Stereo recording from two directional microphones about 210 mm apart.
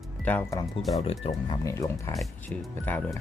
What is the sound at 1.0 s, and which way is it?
Speech, 30° left (ahead or behind).